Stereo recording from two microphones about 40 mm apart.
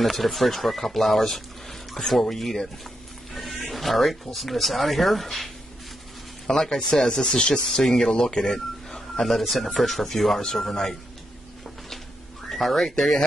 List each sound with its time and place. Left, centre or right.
0.0 s speech: centre
12.4 s speech: centre